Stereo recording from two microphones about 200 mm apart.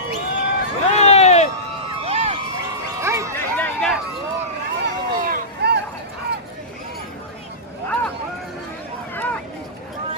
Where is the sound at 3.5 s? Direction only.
5° left (ahead or behind).